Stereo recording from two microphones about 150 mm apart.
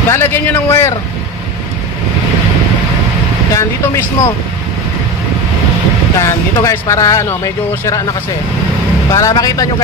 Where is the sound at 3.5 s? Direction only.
20° left (ahead or behind).